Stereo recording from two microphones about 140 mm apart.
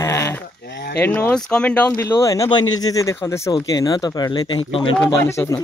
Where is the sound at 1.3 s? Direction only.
5° left (ahead or behind).